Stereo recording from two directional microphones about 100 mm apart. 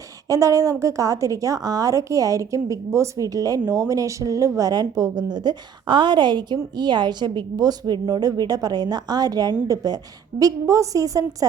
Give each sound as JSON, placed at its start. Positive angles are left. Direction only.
{"t": 0.3, "sound": "a woman's voice", "side_deg": -35}